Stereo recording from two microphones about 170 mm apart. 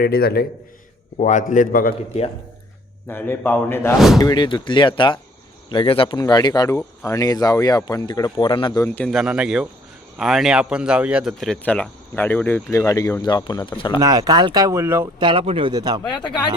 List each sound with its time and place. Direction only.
0.0 s a man's voice: 70° left (ahead or behind)
1.2 s a man's voice: 45° left (ahead or behind)
3.1 s a man's voice: 10° left (ahead or behind)
3.9 s speech: centre (ahead or behind)
4.2 s speech: 25° left (ahead or behind)
8.8 s a man's voice: 10° left (ahead or behind)
9.1 s speech: 5° right (ahead or behind); by 14.0 s 30° left (ahead or behind)
14.0 s speech: 20° right (ahead or behind)
15.2 s speech: 30° right (ahead or behind)
16.0 s speech: 25° left (ahead or behind)